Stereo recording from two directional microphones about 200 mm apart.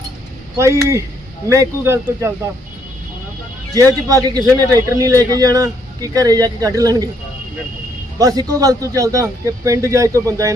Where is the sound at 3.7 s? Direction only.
15° right (ahead or behind).